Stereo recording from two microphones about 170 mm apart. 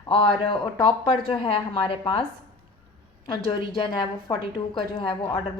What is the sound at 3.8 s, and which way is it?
A woman's voice, 25° left (ahead or behind).